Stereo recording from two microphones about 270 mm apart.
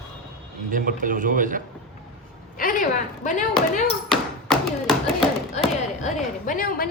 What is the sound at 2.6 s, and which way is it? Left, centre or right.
Speech, left.